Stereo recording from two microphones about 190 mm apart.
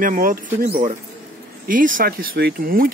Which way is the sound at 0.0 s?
45° right (ahead or behind).